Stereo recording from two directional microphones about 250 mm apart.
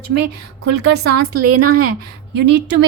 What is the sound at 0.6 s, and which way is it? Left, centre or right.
Speech, right.